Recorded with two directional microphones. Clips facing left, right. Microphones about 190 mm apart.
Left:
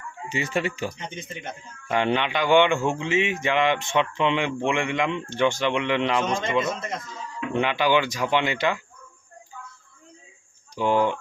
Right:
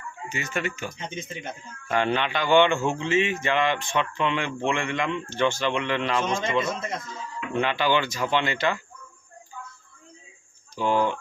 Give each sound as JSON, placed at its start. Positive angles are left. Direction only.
{"t": 0.3, "sound": "speech", "side_deg": 30}
{"t": 1.9, "sound": "a man's voice", "side_deg": 15}
{"t": 6.4, "sound": "a man's voice", "side_deg": -10}
{"t": 7.5, "sound": "a man's voice", "side_deg": 15}
{"t": 10.8, "sound": "a man's voice", "side_deg": 15}